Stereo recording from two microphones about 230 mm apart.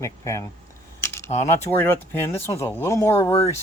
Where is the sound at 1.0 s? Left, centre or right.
Centre.